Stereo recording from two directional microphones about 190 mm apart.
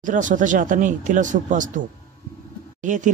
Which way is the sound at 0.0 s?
40° right (ahead or behind).